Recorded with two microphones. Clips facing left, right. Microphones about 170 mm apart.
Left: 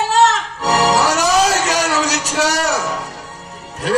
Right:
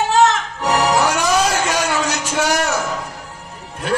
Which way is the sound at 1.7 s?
40° left (ahead or behind).